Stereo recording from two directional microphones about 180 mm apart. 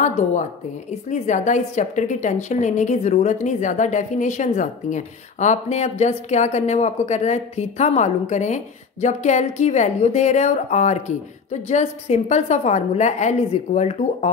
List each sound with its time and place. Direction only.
0.0 s a woman's voice: 40° left (ahead or behind)